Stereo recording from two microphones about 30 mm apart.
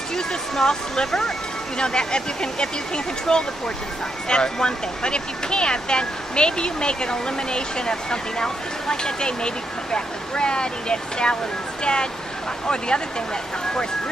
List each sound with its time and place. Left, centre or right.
0.1 s speech: centre